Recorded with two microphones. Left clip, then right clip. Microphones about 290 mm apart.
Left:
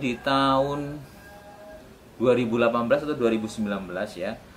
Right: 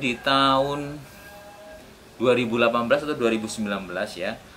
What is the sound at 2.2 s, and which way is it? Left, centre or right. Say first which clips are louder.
Speech: right 1 dB; centre.